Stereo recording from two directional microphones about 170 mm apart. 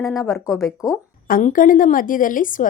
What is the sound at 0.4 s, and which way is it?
Speech, 15° left (ahead or behind).